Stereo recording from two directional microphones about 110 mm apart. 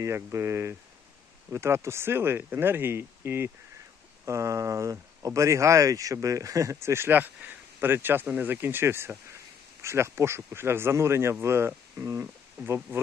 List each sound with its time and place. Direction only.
0.0 s speech: 25° right (ahead or behind)